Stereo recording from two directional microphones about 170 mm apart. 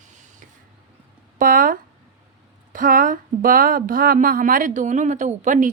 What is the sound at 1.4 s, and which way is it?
Speech, 55° right (ahead or behind).